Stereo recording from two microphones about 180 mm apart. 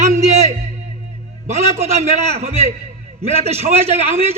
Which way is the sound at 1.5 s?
35° right (ahead or behind).